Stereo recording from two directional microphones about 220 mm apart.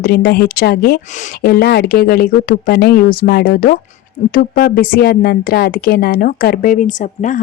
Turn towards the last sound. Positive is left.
turn(degrees=35)  # may be behind; listen again after turning